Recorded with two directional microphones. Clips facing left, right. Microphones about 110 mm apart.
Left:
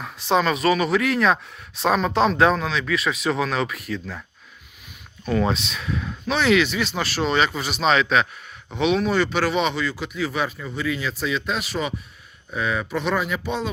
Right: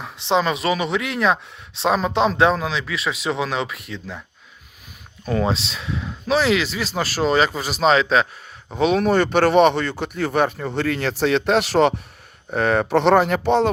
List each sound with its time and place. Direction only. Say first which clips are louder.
0.0 s speech: right 1 dB; 20° right (ahead or behind)
5.2 s speech: right 1 dB; 30° right (ahead or behind)
9.0 s speech: right 4 dB; 50° right (ahead or behind); by 11.9 s 75° right (ahead or behind)
12.5 s speech: right 7 dB; 60° right (ahead or behind)